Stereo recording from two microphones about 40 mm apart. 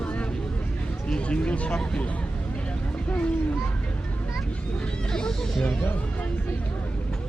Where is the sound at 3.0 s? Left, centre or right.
Left.